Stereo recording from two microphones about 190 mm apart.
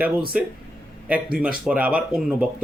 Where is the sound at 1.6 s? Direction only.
5° right (ahead or behind).